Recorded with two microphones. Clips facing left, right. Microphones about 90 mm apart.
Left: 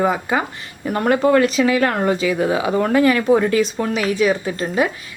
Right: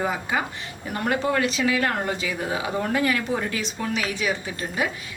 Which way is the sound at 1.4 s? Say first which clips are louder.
Left 7 dB; 50° left (ahead or behind).